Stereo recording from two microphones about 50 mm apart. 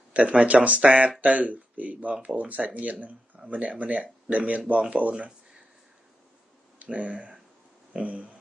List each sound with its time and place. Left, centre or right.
0.1 s speech: right
6.8 s speech: right
7.9 s a sound: right